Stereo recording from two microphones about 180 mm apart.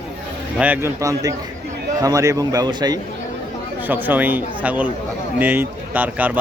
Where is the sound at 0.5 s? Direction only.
10° right (ahead or behind).